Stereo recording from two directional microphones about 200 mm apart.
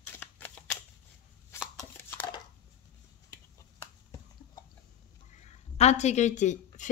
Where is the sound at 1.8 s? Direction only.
10° left (ahead or behind).